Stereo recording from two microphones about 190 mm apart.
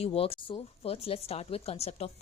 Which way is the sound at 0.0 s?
30° left (ahead or behind).